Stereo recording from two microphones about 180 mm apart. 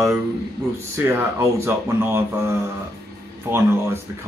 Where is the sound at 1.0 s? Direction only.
15° right (ahead or behind).